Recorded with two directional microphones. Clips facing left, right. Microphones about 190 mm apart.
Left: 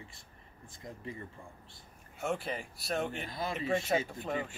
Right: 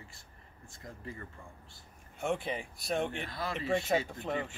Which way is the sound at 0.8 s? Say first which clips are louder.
Left 2 dB; 20° left (ahead or behind).